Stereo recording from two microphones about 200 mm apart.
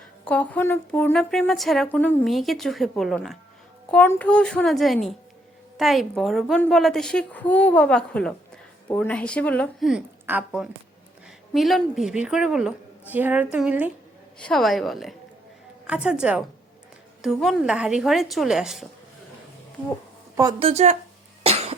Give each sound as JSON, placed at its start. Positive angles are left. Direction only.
{"t": 0.3, "sound": "speech", "side_deg": 10}
{"t": 9.9, "sound": "a woman's voice", "side_deg": -5}
{"t": 14.3, "sound": "speech", "side_deg": 5}
{"t": 20.3, "sound": "speech", "side_deg": -20}
{"t": 21.4, "sound": "cough", "side_deg": -30}